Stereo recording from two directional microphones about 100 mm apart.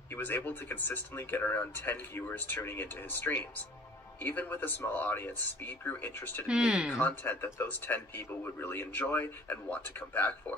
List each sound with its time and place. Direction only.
0.1 s speech: 20° left (ahead or behind)
6.4 s speech: 10° right (ahead or behind)
7.0 s speech: 20° left (ahead or behind)